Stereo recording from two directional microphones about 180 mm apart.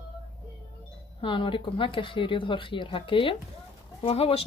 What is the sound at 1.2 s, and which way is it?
Speech, 30° left (ahead or behind).